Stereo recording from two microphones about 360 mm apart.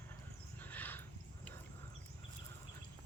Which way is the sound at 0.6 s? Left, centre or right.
Centre.